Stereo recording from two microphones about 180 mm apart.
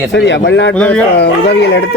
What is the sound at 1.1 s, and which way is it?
Speech, 70° left (ahead or behind).